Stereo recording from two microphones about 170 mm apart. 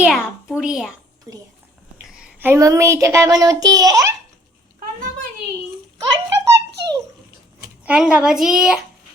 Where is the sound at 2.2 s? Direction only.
10° right (ahead or behind).